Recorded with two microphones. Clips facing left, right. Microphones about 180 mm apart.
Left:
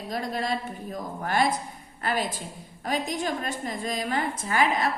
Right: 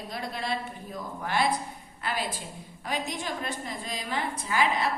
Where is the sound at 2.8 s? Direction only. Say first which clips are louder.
Left 4 dB; 45° left (ahead or behind).